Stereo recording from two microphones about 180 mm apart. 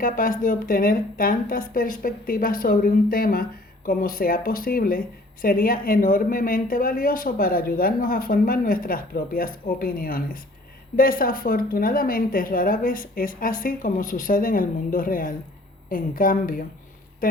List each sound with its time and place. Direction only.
0.0 s speech: 50° left (ahead or behind)